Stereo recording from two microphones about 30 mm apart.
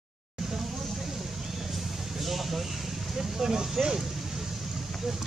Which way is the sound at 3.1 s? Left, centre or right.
Centre.